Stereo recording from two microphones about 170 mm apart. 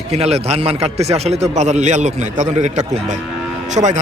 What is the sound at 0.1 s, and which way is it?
A man's voice, 40° right (ahead or behind).